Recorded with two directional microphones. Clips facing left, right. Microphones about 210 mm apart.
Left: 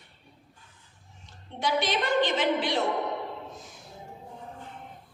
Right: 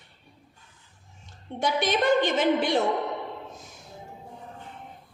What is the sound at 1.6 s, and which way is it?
A woman's voice, 45° right (ahead or behind).